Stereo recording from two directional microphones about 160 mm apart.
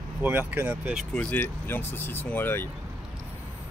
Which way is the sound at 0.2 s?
10° right (ahead or behind).